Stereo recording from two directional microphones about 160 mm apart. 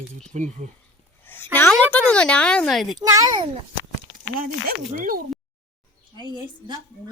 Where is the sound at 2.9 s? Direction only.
20° right (ahead or behind).